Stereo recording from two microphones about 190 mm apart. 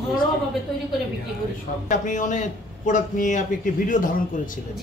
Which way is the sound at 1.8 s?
40° left (ahead or behind).